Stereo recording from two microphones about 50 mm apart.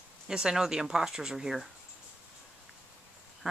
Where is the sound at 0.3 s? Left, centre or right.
Centre.